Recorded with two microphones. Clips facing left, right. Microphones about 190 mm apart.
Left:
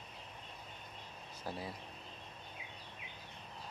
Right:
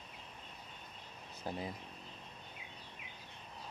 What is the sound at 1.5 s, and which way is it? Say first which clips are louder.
Speech: right 2 dB; 20° right (ahead or behind).